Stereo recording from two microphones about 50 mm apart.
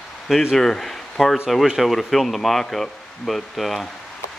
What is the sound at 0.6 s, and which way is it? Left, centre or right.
Speech, centre.